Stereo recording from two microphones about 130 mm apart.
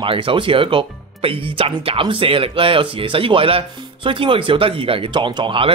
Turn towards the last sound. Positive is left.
turn(degrees=-40)  # may be behind; listen again after turning